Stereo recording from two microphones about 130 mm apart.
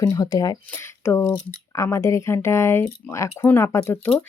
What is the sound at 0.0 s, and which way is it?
Speech, 25° left (ahead or behind).